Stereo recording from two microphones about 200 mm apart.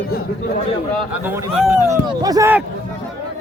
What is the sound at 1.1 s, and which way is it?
Speech, 5° right (ahead or behind).